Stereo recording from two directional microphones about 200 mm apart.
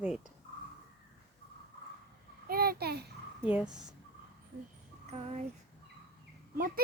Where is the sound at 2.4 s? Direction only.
50° right (ahead or behind).